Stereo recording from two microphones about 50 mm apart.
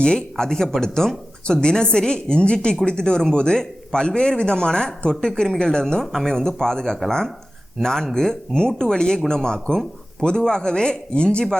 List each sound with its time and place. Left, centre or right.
0.0 s a man's voice: centre